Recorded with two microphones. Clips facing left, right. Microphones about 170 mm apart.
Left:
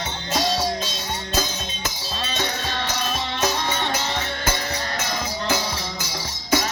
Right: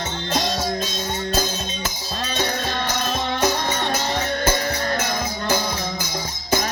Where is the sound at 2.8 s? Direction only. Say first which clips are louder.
Right 3 dB; 50° right (ahead or behind).